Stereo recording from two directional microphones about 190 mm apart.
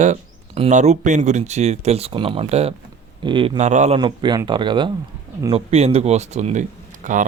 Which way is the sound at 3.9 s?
25° right (ahead or behind).